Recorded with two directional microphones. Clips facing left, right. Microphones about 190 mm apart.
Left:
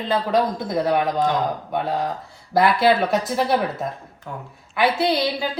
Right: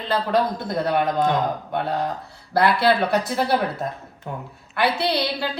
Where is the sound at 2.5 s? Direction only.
Centre (ahead or behind).